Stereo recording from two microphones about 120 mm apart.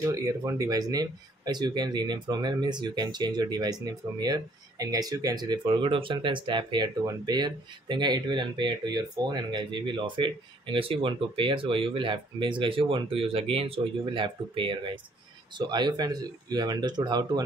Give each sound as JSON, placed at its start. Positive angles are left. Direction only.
{"t": 0.0, "sound": "speech", "side_deg": -25}